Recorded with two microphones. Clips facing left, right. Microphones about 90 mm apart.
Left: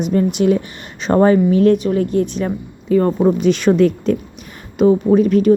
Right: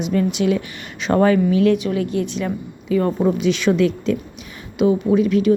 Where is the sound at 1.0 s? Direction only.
35° left (ahead or behind).